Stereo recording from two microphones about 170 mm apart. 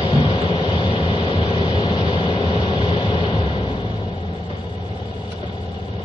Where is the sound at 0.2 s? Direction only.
30° left (ahead or behind).